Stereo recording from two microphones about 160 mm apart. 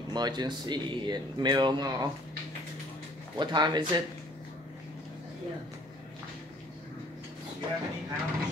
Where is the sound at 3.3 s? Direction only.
25° right (ahead or behind).